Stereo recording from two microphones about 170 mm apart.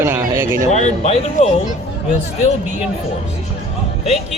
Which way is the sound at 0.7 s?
40° left (ahead or behind).